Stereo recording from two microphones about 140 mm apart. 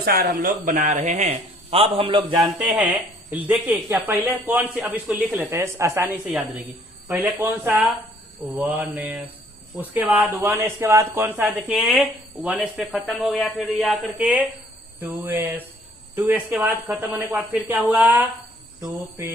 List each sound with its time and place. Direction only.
0.0 s speech: 90° right; by 1.3 s 60° right (ahead or behind)
1.7 s a man's voice: 45° right (ahead or behind)
2.4 s a man's voice: 5° right (ahead or behind)
10.6 s a man's voice: 20° right (ahead or behind)
11.7 s speech: centre (ahead or behind)
14.2 s a man's voice: 10° right (ahead or behind)